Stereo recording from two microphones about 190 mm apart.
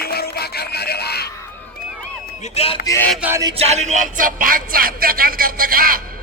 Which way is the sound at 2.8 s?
15° left (ahead or behind).